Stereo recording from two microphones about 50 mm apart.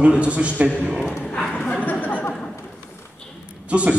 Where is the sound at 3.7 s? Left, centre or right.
Right.